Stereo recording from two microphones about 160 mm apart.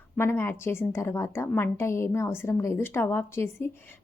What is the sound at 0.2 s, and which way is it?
A woman's voice, 15° left (ahead or behind).